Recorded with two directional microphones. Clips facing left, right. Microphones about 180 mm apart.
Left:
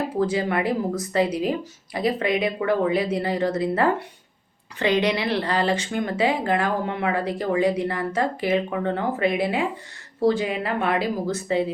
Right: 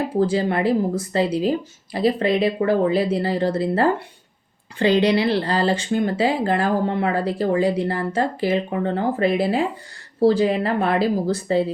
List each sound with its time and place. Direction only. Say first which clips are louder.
0.2 s speech: right 3 dB; 30° right (ahead or behind)